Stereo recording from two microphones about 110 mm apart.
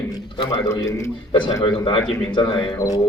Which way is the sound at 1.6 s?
45° left (ahead or behind).